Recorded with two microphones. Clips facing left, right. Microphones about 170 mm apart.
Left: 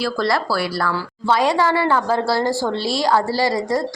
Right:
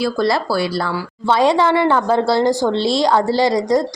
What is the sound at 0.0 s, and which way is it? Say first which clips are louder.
A woman's voice: right 3 dB; 20° right (ahead or behind).